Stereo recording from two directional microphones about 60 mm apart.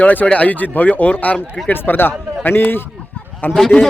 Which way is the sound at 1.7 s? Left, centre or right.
Left.